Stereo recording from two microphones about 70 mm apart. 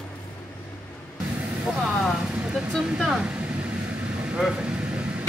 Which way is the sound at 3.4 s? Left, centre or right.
Centre.